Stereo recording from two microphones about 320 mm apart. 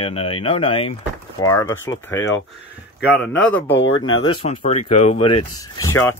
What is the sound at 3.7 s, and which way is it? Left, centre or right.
Speech, left.